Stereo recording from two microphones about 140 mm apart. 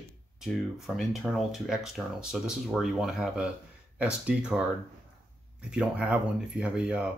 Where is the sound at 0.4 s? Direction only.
Centre (ahead or behind).